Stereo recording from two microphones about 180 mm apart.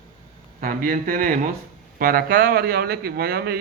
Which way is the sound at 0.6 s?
50° right (ahead or behind).